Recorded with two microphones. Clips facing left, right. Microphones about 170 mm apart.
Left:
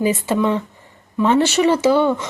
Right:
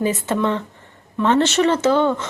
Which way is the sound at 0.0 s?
10° left (ahead or behind).